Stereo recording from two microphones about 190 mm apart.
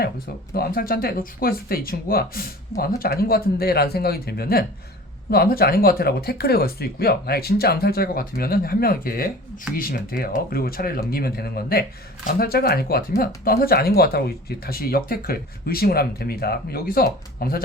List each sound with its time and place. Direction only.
0.5 s speech: 55° left (ahead or behind)